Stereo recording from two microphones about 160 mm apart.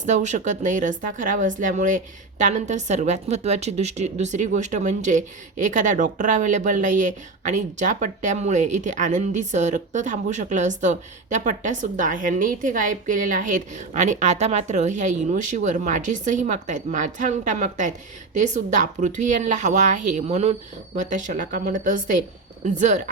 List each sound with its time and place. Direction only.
0.0 s speech: 50° right (ahead or behind)